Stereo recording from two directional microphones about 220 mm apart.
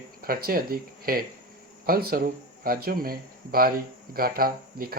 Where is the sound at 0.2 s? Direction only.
40° right (ahead or behind).